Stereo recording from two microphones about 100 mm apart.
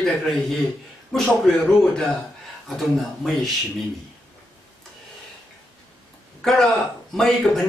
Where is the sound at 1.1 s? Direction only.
5° left (ahead or behind).